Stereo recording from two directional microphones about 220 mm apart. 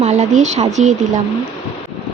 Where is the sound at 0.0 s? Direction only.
30° right (ahead or behind).